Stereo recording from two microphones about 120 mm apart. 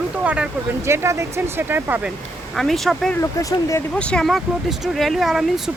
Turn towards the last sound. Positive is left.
turn(degrees=0)  # may be behind; listen again after turning